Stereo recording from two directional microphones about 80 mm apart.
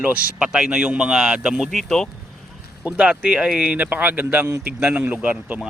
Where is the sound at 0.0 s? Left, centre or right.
Centre.